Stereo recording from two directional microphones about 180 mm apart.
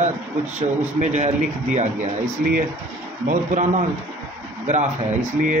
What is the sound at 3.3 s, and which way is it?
A man's voice, 45° right (ahead or behind).